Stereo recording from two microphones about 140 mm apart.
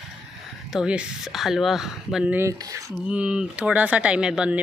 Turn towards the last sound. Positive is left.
turn(degrees=-5)  # may be behind; listen again after turning